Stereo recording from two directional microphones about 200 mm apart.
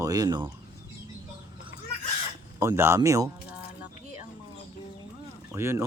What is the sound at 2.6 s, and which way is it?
Speech, 15° right (ahead or behind).